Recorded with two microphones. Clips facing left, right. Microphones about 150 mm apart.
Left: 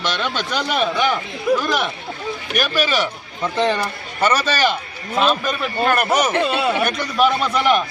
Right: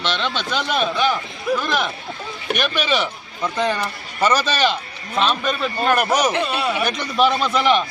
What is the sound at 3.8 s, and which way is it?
Speech, centre (ahead or behind).